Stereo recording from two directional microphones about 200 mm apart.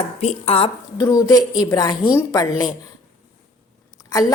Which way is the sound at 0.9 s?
20° left (ahead or behind).